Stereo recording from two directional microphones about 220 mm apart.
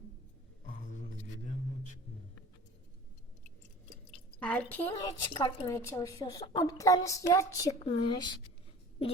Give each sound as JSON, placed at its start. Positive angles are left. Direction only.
{"t": 4.4, "sound": "a woman's voice", "side_deg": 5}